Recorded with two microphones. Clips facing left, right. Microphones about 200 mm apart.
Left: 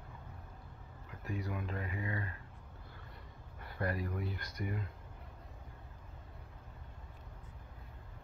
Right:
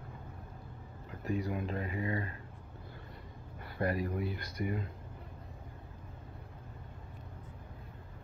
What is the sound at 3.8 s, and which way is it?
Speech, 15° right (ahead or behind).